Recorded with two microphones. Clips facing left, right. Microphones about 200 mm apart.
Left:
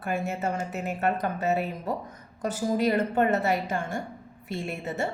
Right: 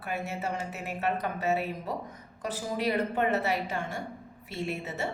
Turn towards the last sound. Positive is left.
turn(degrees=50)  # may be behind; listen again after turning